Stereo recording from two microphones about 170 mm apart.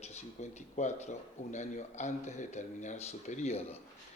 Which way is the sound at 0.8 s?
45° left (ahead or behind).